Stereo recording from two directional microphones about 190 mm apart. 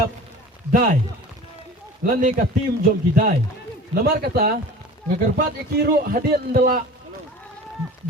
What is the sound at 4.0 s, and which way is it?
A man's voice, 55° right (ahead or behind).